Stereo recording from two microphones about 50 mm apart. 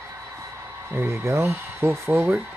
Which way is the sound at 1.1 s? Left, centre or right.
Right.